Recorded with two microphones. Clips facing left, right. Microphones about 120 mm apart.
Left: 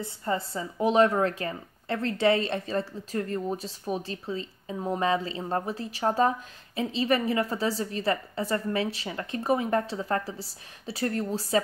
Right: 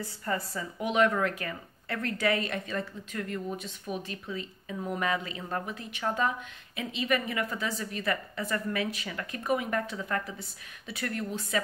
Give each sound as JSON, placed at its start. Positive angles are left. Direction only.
{"t": 0.0, "sound": "speech", "side_deg": 25}